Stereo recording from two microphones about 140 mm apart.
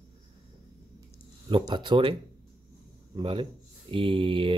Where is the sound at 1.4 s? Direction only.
35° right (ahead or behind).